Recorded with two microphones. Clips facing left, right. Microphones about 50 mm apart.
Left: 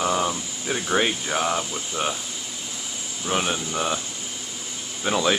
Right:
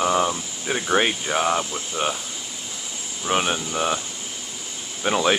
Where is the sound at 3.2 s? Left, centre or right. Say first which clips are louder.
Right 2 dB; centre.